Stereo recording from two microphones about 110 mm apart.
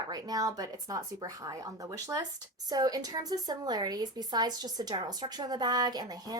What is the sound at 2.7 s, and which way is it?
A woman's voice, 35° right (ahead or behind).